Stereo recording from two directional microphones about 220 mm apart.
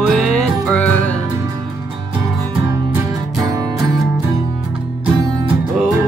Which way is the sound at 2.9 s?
15° right (ahead or behind).